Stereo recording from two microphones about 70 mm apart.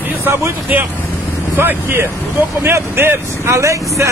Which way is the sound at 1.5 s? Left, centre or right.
Right.